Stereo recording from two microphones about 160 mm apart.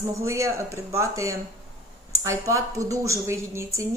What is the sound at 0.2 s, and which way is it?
A woman's voice, 20° right (ahead or behind).